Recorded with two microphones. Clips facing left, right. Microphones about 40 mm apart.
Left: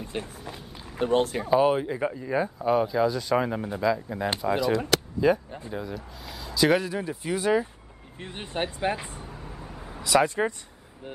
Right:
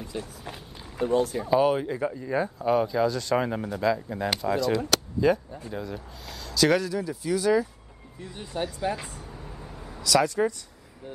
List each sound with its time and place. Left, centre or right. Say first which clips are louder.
0.0 s a sound: left 1 dB; left
0.9 s speech: left 1 dB; left
1.5 s speech: left 1 dB; centre
6.2 s a sound: left 1 dB; centre
6.5 s speech: even; centre
6.9 s speech: right 2 dB; left
8.2 s speech: left 1 dB; left
8.9 s speech: left 1 dB; left
9.4 s vehicle: left 1 dB; centre
9.9 s speech: left 1 dB; left